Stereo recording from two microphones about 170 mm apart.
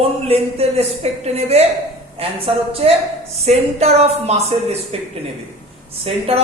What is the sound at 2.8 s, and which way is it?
Speech, 35° right (ahead or behind).